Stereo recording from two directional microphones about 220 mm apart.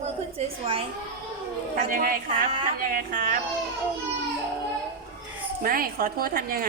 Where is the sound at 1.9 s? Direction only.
40° right (ahead or behind).